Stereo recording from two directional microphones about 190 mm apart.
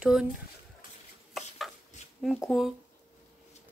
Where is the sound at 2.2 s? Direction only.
Centre (ahead or behind).